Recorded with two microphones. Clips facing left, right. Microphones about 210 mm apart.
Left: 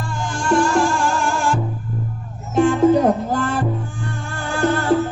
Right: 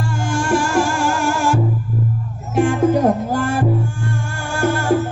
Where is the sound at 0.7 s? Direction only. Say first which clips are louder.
Right 1 dB; 10° right (ahead or behind).